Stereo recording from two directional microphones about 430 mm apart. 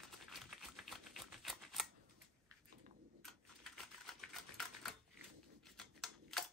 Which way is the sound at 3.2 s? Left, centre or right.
Centre.